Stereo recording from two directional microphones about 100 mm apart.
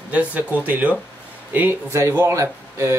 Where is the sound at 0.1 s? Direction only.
15° right (ahead or behind).